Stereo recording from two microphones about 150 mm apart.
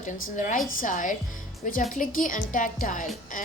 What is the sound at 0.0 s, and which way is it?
A woman's voice, 60° left (ahead or behind).